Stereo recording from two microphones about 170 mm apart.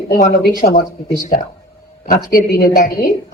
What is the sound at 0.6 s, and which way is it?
Speech, 45° left (ahead or behind).